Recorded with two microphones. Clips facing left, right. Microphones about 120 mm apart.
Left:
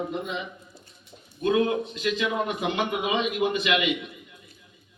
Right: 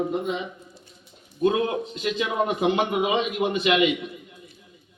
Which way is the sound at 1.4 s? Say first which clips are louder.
Right 1 dB; 30° right (ahead or behind).